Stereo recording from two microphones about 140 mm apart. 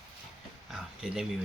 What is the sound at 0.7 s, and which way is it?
Speech, 5° right (ahead or behind).